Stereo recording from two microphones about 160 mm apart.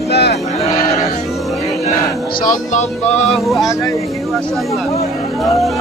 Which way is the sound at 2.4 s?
45° left (ahead or behind).